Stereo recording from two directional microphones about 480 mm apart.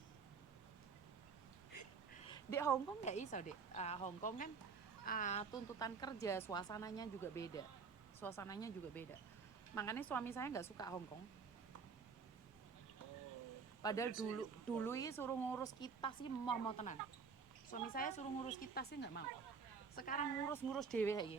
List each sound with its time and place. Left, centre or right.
2.2 s a woman's voice: centre
13.8 s speech: centre
20.5 s a woman's voice: centre